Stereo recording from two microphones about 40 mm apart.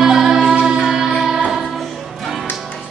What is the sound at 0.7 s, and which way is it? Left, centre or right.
Music, centre.